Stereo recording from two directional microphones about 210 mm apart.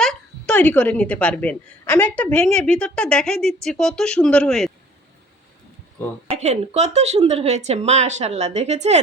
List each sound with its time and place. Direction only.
0.0 s a woman's voice: 5° left (ahead or behind)
6.2 s a woman's voice: 30° right (ahead or behind)